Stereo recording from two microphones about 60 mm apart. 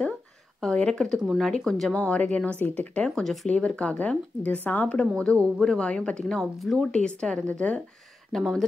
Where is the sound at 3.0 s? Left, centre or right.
Centre.